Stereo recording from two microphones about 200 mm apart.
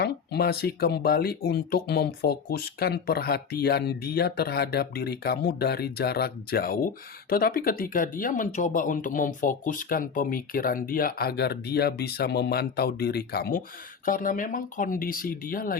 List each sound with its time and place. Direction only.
0.0 s speech: 55° left (ahead or behind)